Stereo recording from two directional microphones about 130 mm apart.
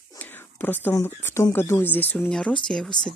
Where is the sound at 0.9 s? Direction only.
20° left (ahead or behind).